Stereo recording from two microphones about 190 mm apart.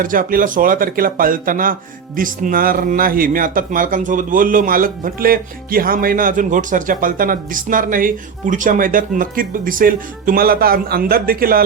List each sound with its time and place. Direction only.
0.0 s speech: 45° right (ahead or behind)